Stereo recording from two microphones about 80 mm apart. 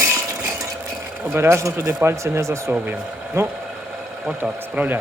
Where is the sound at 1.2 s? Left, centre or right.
Right.